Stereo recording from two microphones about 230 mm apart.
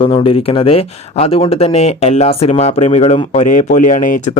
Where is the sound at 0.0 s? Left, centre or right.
Left.